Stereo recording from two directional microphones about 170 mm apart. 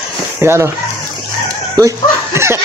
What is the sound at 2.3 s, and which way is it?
Chuckle, 15° right (ahead or behind).